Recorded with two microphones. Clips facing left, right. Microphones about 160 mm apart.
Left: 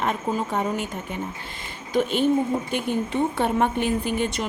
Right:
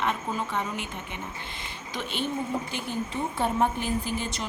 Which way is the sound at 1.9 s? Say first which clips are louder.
Left 11 dB; 45° left (ahead or behind).